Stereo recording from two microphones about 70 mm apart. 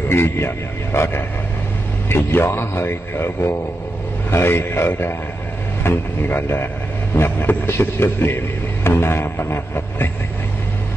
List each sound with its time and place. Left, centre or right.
0.1 s a man's voice: left